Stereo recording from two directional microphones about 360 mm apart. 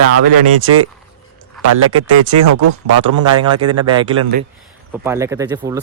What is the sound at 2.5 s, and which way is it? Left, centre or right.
Speech, right.